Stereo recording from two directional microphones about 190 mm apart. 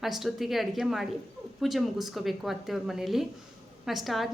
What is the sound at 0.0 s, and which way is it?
A woman's voice, centre (ahead or behind).